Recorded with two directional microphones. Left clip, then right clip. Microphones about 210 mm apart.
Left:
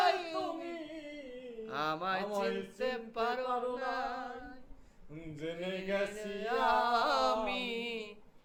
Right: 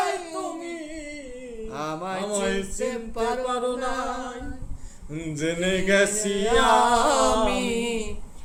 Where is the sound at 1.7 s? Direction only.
10° right (ahead or behind).